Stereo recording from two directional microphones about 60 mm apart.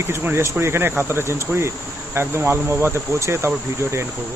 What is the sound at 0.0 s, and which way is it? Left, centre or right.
Speech, right.